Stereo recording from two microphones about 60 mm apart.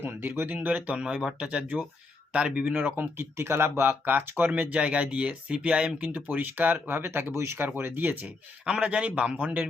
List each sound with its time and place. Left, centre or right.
0.0 s speech: right
2.7 s speech: right
4.7 s speech: right
6.0 s speech: right
7.8 s speech: right
8.6 s speech: centre